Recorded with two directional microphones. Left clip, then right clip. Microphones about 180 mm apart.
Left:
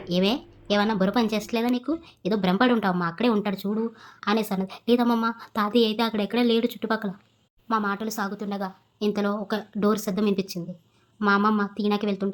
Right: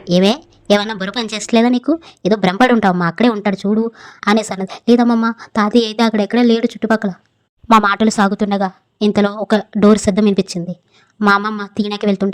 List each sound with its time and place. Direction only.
0.1 s speech: 45° right (ahead or behind)
2.7 s a woman's voice: 30° right (ahead or behind)
3.0 s a woman's voice: 40° right (ahead or behind)